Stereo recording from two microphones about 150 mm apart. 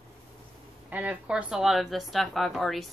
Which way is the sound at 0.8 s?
10° right (ahead or behind).